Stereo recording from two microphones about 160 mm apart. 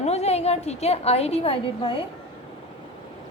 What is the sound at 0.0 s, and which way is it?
A woman's voice, 40° left (ahead or behind).